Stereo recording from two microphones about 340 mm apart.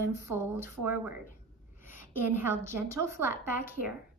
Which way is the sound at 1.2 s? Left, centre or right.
Left.